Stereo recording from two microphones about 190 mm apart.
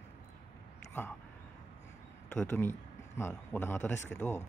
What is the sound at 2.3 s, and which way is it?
A man's voice, 10° left (ahead or behind).